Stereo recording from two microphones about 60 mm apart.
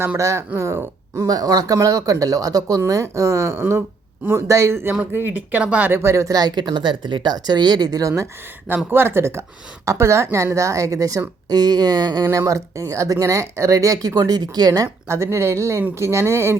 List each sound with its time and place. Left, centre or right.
0.2 s a woman's voice: right
1.1 s speech: right
5.1 s speech: right
5.9 s a woman's voice: right
7.3 s speech: right
8.7 s a woman's voice: right
11.4 s speech: right
15.0 s speech: right